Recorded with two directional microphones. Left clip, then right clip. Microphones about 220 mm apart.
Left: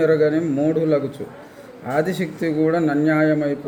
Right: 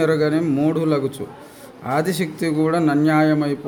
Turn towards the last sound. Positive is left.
turn(degrees=-55)  # may be behind; listen again after turning